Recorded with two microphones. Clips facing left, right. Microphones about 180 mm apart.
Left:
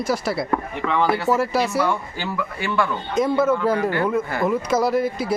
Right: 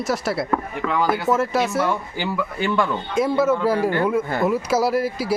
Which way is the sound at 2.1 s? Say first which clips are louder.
Right 3 dB; 20° right (ahead or behind).